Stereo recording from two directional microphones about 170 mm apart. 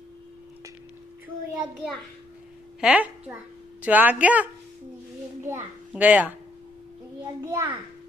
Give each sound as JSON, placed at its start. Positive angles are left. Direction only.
{"t": 2.8, "sound": "a child's voice", "side_deg": -10}
{"t": 7.4, "sound": "speech", "side_deg": -20}